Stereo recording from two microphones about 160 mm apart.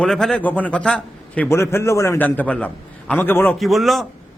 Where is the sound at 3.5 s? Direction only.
Centre (ahead or behind).